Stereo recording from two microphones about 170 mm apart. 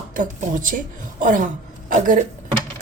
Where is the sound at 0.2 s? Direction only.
50° right (ahead or behind).